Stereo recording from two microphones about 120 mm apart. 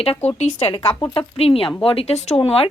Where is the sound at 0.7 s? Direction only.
50° left (ahead or behind).